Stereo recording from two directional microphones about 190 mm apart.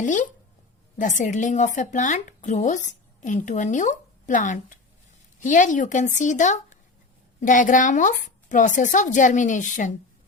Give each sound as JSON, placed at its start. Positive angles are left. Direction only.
{"t": 0.0, "sound": "speech", "side_deg": 40}